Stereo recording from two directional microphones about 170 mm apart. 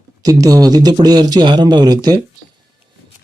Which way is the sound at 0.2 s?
20° right (ahead or behind).